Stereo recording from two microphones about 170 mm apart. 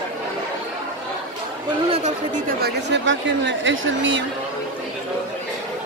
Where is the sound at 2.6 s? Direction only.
90° right.